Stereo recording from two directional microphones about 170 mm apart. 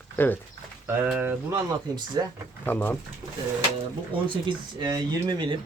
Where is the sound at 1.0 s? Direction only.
5° right (ahead or behind).